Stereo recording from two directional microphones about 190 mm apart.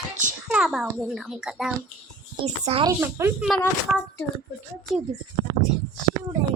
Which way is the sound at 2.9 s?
15° right (ahead or behind).